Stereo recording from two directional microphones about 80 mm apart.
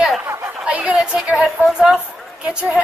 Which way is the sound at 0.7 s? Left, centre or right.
Centre.